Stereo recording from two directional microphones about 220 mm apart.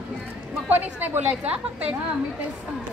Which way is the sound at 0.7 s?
10° right (ahead or behind).